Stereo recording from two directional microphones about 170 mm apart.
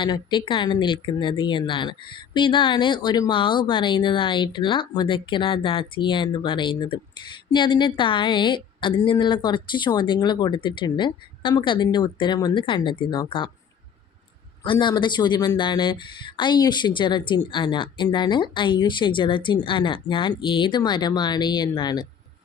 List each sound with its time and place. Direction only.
0.0 s speech: 30° left (ahead or behind)
14.6 s speech: 25° left (ahead or behind)